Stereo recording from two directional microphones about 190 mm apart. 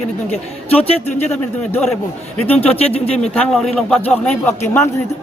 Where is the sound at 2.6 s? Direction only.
30° left (ahead or behind).